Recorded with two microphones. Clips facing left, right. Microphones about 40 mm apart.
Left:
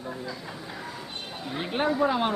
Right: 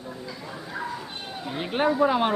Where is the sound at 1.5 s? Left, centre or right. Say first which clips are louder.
Right 3 dB; centre.